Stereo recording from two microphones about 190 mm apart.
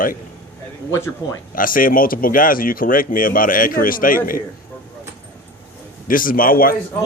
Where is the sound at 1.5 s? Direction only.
45° left (ahead or behind).